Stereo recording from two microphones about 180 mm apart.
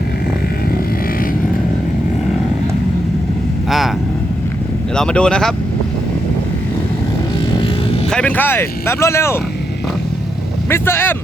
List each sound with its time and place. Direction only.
3.7 s speech: centre (ahead or behind)
4.9 s speech: 5° left (ahead or behind)
8.1 s speech: 10° left (ahead or behind)
10.7 s speech: 15° left (ahead or behind)